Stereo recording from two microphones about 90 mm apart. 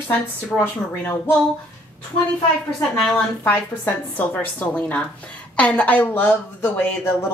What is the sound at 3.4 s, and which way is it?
A woman's voice, 25° left (ahead or behind).